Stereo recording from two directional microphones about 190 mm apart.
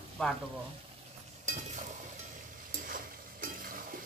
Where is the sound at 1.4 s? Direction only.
40° right (ahead or behind).